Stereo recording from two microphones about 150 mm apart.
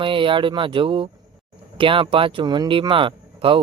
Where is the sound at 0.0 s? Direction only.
35° right (ahead or behind).